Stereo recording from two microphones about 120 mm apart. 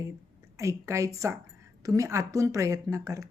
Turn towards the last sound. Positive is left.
turn(degrees=-25)  # may be behind; listen again after turning